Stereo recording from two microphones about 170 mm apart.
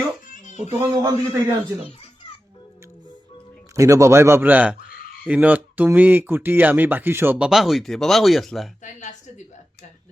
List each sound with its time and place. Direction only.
0.3 s a sound: 45° left (ahead or behind)
0.7 s a man's voice: 15° right (ahead or behind)
3.8 s speech: 20° right (ahead or behind); by 8.7 s centre (ahead or behind)
8.8 s speech: 45° left (ahead or behind)